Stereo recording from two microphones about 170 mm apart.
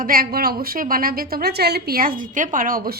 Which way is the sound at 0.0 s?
60° right (ahead or behind).